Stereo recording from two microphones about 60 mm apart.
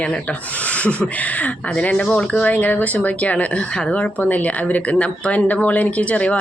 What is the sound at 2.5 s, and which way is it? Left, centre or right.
Speech, left.